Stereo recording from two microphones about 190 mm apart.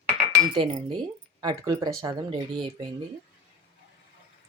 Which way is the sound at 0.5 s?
25° right (ahead or behind).